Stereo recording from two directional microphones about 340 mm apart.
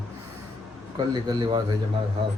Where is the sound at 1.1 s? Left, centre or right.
Centre.